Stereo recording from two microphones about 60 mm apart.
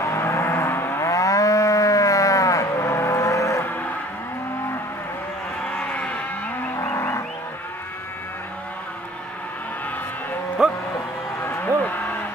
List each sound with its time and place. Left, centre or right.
0.0 s moo: left
5.7 s livestock: left
6.8 s livestock: left
10.6 s music: centre
11.6 s cattle: left